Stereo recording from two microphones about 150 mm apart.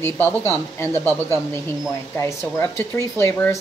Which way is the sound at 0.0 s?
10° left (ahead or behind).